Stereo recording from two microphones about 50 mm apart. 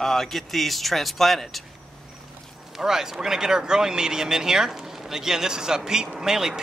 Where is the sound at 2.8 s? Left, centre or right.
Centre.